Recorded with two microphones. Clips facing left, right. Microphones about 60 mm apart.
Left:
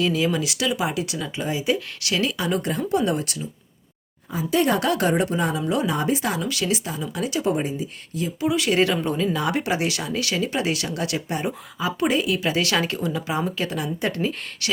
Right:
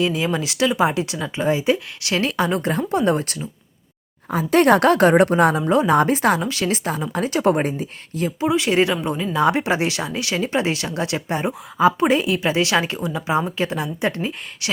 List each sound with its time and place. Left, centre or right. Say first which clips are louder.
0.0 s speech: right 1 dB; right
4.3 s a woman's voice: right 6 dB; right
5.6 s speech: right 6 dB; right
6.0 s speech: right 6 dB; right
6.4 s speech: right 3 dB; right
8.4 s speech: right 2 dB; right
9.3 s speech: right 5 dB; right